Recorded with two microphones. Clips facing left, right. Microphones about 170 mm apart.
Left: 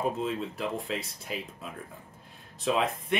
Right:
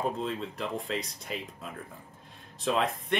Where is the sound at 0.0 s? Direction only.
5° left (ahead or behind).